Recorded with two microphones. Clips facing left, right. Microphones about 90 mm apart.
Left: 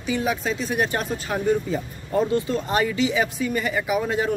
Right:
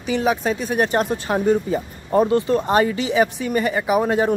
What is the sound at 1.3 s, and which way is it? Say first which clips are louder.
A man's voice: right 3 dB; 25° right (ahead or behind).